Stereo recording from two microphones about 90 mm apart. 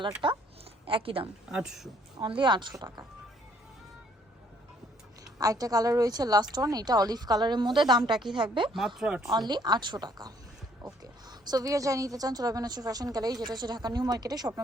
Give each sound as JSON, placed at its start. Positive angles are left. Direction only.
{"t": 0.2, "sound": "a sound", "side_deg": -75}
{"t": 1.5, "sound": "speech", "side_deg": -5}
{"t": 2.1, "sound": "speech", "side_deg": -65}
{"t": 2.7, "sound": "a woman's voice", "side_deg": -45}
{"t": 5.4, "sound": "a woman's voice", "side_deg": -40}
{"t": 9.0, "sound": "speech", "side_deg": -10}
{"t": 9.5, "sound": "a woman's voice", "side_deg": -50}